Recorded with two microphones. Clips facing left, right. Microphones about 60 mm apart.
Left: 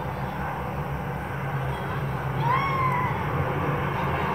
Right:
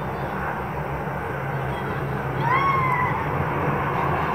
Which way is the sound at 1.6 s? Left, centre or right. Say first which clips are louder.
Right 3 dB; right.